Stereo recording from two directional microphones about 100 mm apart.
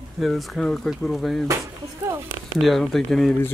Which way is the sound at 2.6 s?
Centre (ahead or behind).